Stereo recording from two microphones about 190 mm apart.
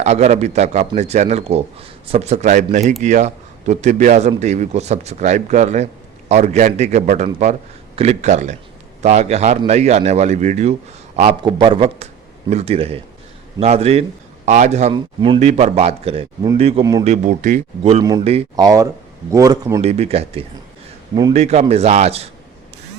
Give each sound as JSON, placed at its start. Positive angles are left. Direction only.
{"t": 0.0, "sound": "a man's voice", "side_deg": -35}
{"t": 18.5, "sound": "a man's voice", "side_deg": -20}
{"t": 19.8, "sound": "speech", "side_deg": -35}